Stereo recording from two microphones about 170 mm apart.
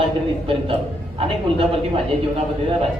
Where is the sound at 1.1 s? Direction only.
35° right (ahead or behind).